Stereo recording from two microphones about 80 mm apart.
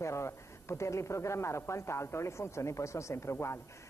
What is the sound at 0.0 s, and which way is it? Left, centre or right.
A woman's voice, left.